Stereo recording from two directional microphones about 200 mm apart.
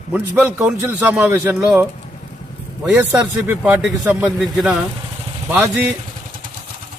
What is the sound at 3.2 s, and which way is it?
Speech, 10° right (ahead or behind).